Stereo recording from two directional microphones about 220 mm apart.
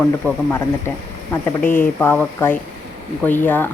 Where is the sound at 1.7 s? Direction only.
10° left (ahead or behind).